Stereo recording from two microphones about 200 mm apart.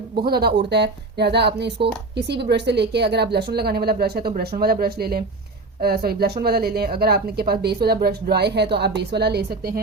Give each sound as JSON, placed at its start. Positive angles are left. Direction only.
{"t": 0.3, "sound": "speech", "side_deg": -50}